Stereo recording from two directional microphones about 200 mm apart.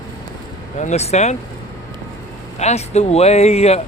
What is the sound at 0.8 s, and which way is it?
Speech, 35° left (ahead or behind).